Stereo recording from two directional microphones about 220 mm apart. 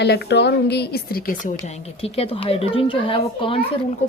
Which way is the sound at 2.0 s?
25° left (ahead or behind).